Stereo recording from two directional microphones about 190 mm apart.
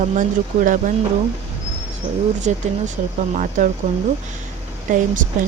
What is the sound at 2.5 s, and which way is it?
Speech, 40° right (ahead or behind).